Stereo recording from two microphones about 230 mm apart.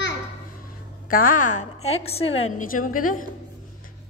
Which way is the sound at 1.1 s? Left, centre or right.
Left.